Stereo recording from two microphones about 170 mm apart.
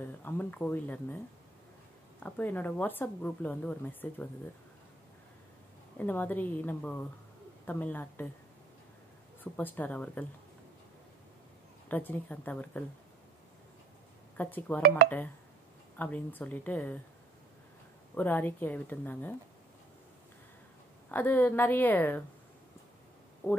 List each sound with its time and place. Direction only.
0.2 s speech: 10° left (ahead or behind)
5.9 s speech: 10° left (ahead or behind)
9.4 s speech: 10° left (ahead or behind)
11.9 s speech: 10° left (ahead or behind)
14.3 s speech: 10° left (ahead or behind)
16.0 s speech: 10° left (ahead or behind)
18.1 s speech: 10° left (ahead or behind)
21.1 s speech: 10° left (ahead or behind)
23.4 s speech: 15° left (ahead or behind)